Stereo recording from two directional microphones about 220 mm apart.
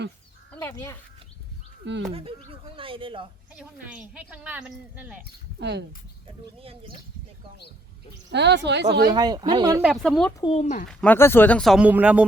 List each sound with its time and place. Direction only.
0.5 s speech: 10° left (ahead or behind)
2.1 s speech: 25° right (ahead or behind)
3.5 s speech: 5° right (ahead or behind)
5.2 s speech: 50° right (ahead or behind)
6.6 s speech: 25° right (ahead or behind)
8.3 s speech: 50° right (ahead or behind)
9.0 s speech: 20° right (ahead or behind)
9.8 s speech: centre (ahead or behind)
10.4 s speech: 30° left (ahead or behind)
10.8 s speech: 5° left (ahead or behind)